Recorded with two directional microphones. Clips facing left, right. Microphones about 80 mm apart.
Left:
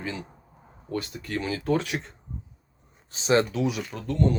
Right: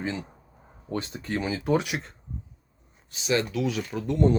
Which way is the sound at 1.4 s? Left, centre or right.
Centre.